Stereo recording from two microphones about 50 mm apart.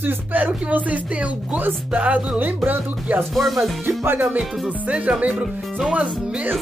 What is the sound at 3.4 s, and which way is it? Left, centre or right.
Music, centre.